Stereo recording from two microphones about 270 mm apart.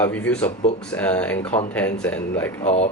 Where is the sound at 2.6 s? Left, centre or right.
Left.